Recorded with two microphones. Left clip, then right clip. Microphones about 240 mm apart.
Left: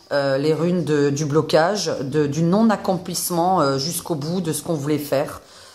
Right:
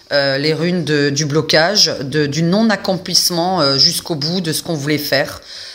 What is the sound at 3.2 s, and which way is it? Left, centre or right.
Speech, right.